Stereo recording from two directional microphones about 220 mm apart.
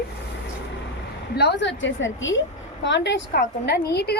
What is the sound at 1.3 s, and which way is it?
A woman's voice, 50° left (ahead or behind).